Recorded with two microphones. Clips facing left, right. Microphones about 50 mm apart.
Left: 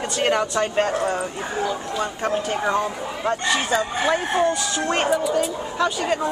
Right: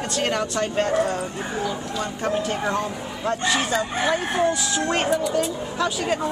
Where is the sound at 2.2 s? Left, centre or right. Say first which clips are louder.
Right 1 dB; centre.